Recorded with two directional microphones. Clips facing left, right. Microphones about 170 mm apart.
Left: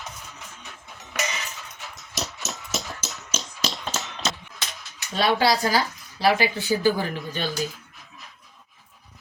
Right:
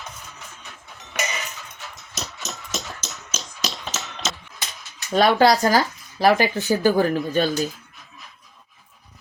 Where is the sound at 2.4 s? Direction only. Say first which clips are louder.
Even; 10° left (ahead or behind).